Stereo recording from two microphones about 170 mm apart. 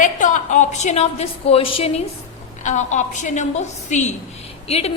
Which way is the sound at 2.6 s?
45° left (ahead or behind).